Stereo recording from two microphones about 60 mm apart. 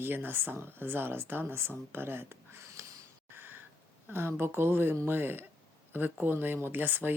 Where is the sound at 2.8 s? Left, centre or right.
Right.